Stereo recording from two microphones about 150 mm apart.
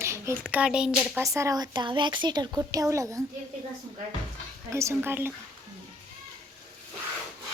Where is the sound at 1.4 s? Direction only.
25° right (ahead or behind).